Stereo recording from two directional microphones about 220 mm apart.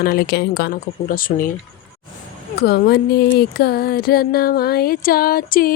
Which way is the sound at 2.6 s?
45° left (ahead or behind).